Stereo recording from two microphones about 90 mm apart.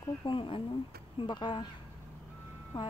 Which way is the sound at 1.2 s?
60° left (ahead or behind).